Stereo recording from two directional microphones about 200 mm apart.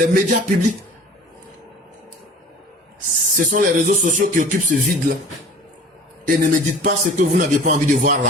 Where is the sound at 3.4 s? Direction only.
40° right (ahead or behind).